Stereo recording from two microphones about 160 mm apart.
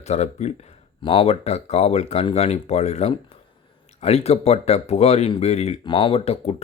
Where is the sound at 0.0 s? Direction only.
45° left (ahead or behind).